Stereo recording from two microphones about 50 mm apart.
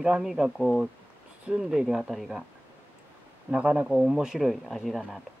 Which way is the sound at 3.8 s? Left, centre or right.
Centre.